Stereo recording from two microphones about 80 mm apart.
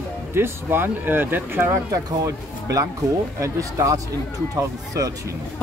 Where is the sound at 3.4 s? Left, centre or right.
Right.